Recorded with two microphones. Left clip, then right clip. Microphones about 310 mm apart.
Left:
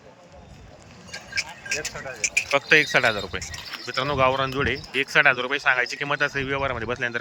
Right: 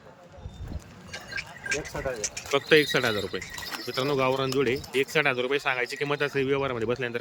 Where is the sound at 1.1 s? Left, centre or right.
Left.